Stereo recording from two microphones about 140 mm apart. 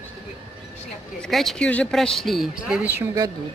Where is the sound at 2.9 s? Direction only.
15° right (ahead or behind).